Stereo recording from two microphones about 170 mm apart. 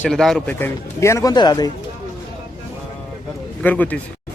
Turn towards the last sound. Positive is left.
turn(degrees=10)  # may be behind; listen again after turning